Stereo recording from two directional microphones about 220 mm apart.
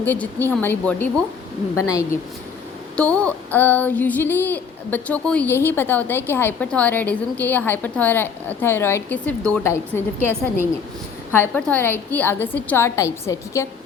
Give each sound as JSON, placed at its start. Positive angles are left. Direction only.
{"t": 0.0, "sound": "child singing", "side_deg": 10}